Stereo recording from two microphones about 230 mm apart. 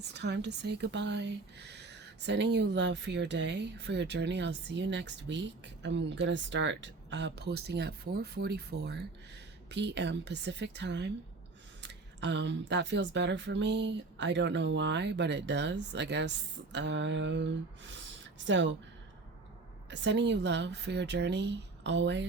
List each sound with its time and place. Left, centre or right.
0.0 s speech: right
19.9 s speech: right